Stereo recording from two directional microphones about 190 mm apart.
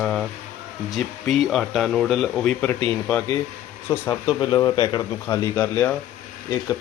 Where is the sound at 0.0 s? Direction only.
Centre (ahead or behind).